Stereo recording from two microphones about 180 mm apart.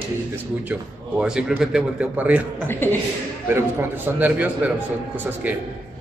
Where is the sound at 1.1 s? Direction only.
5° right (ahead or behind).